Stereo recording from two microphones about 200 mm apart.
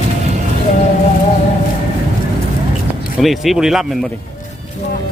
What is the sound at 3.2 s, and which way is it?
Speech, centre (ahead or behind).